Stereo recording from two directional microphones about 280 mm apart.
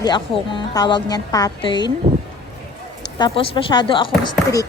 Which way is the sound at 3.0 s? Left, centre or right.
Centre.